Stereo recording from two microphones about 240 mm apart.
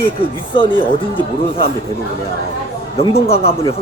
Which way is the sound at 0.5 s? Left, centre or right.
Left.